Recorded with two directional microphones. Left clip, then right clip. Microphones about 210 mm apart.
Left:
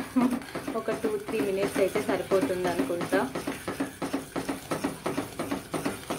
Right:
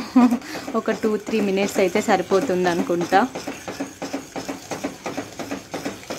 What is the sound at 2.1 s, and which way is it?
Speech, 50° right (ahead or behind).